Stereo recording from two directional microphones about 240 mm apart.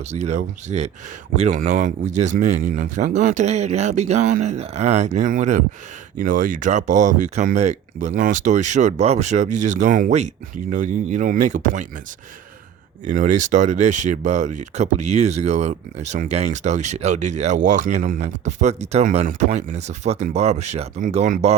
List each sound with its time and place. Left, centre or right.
0.1 s speech: right
13.1 s speech: right